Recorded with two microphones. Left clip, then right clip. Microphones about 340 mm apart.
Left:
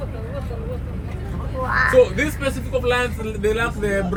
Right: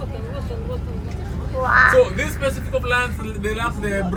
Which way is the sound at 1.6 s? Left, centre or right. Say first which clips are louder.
Right 4 dB; right.